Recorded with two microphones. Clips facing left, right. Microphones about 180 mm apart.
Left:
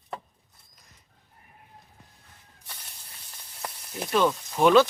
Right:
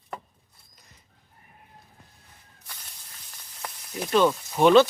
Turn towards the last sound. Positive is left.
turn(degrees=-5)  # may be behind; listen again after turning